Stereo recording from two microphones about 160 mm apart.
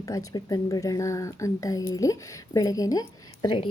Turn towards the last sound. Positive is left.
turn(degrees=25)  # may be behind; listen again after turning